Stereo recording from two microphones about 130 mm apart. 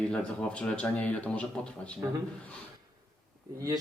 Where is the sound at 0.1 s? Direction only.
10° left (ahead or behind).